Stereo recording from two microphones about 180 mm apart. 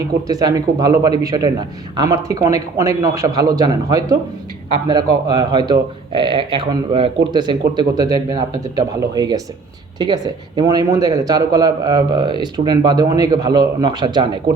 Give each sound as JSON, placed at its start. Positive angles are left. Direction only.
{"t": 0.3, "sound": "speech", "side_deg": -20}